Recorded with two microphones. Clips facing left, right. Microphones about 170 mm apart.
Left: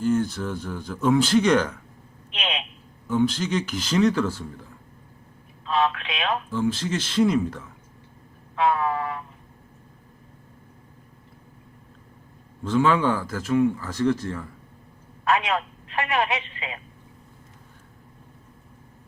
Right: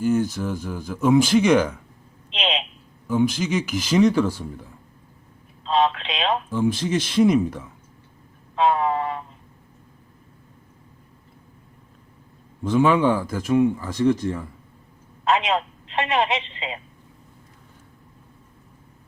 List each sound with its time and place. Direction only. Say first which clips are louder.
0.0 s speech: right 2 dB; 10° right (ahead or behind)
2.3 s a sound: right 5 dB; 25° right (ahead or behind)
3.1 s speech: right 1 dB; 10° right (ahead or behind)
5.6 s speech: right 3 dB; 25° right (ahead or behind)
8.5 s a sound: right 3 dB; 25° right (ahead or behind)
12.6 s speech: right 3 dB; 15° right (ahead or behind)